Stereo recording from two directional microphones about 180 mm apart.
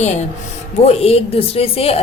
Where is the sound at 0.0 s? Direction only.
40° left (ahead or behind).